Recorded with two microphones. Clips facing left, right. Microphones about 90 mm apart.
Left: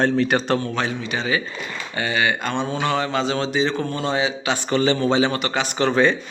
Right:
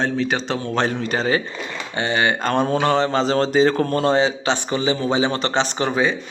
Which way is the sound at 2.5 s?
45° right (ahead or behind).